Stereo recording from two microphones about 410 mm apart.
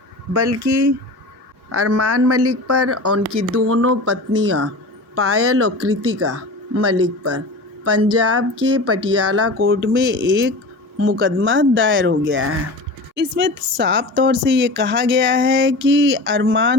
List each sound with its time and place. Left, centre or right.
0.3 s speech: right